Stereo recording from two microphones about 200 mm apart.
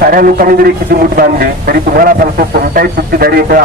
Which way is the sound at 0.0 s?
45° right (ahead or behind).